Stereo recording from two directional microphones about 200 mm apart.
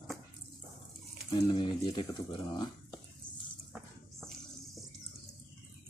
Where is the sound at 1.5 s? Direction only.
25° left (ahead or behind).